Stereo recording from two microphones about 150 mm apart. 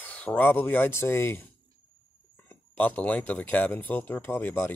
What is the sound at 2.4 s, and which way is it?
Speech, 10° left (ahead or behind).